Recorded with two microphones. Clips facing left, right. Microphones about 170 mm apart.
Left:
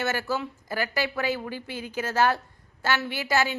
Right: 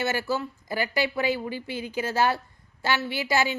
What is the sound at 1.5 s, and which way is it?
Speech, 50° left (ahead or behind).